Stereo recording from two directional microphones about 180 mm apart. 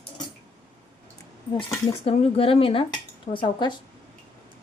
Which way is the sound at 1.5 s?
30° left (ahead or behind).